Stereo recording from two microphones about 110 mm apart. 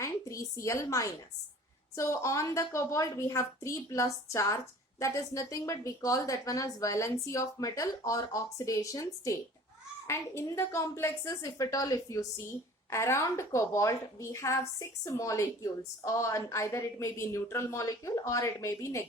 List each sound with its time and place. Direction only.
0.0 s a woman's voice: 30° left (ahead or behind)